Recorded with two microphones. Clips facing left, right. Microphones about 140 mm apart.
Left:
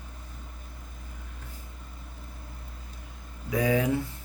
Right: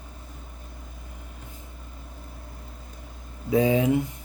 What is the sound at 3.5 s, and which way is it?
Speech, 25° right (ahead or behind).